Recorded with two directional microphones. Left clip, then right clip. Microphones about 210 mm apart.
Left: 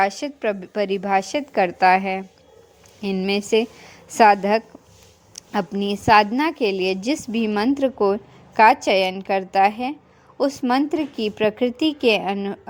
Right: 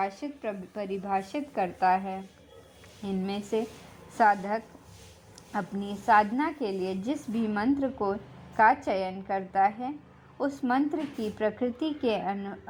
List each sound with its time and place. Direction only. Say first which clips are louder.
0.0 s a woman's voice: left 11 dB; 35° left (ahead or behind)
4.2 s a woman's voice: left 10 dB; 30° left (ahead or behind)
10.6 s a woman's voice: left 7 dB; 20° left (ahead or behind)